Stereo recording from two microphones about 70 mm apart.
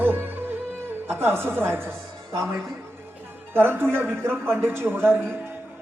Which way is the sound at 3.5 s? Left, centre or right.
Right.